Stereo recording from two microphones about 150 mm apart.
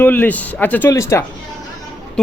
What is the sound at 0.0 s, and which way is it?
Speech, 10° left (ahead or behind).